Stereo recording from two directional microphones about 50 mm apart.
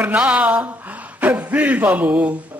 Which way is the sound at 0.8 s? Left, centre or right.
Right.